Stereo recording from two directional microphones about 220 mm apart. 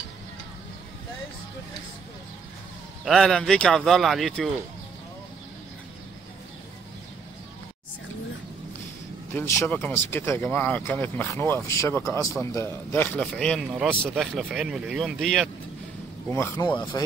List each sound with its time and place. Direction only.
3.1 s speech: centre (ahead or behind)
9.3 s speech: 10° left (ahead or behind)
16.3 s speech: 15° left (ahead or behind)